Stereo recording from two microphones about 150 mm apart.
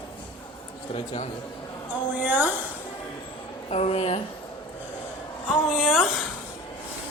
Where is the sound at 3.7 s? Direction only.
45° left (ahead or behind).